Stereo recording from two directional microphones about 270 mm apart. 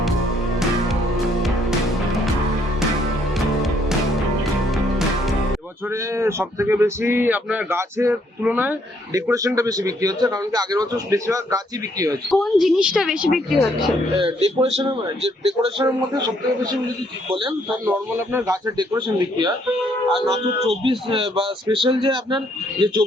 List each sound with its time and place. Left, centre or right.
3.3 s music: centre
5.9 s speech: centre
12.3 s a woman's voice: centre
14.2 s speech: centre
17.8 s speech: centre
20.8 s speech: centre